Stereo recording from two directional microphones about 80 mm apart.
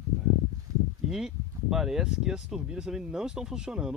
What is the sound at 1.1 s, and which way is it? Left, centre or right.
Speech, centre.